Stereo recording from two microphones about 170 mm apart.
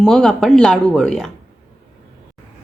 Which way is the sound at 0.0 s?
5° left (ahead or behind).